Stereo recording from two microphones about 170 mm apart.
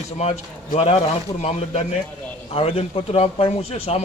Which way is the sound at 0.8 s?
35° left (ahead or behind).